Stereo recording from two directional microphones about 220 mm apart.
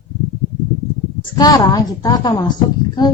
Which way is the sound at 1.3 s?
15° left (ahead or behind).